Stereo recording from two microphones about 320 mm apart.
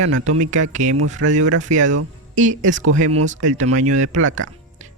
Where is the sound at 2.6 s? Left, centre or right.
Right.